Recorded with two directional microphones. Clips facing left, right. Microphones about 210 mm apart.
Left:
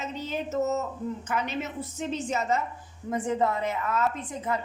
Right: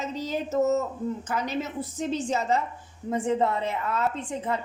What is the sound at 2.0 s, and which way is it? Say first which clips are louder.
A woman's voice: right 2 dB; 35° right (ahead or behind).